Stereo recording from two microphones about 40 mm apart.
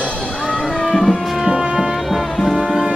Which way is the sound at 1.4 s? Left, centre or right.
Centre.